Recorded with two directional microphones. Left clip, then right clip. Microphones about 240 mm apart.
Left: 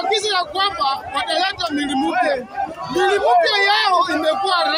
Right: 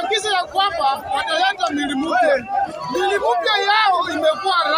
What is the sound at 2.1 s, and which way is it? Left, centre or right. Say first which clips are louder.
Speech: right 4 dB; right.